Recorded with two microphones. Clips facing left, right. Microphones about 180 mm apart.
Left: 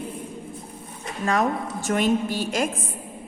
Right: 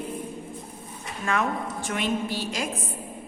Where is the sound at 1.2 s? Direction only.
35° left (ahead or behind).